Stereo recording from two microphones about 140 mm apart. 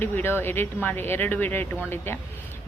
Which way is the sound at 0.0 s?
15° left (ahead or behind).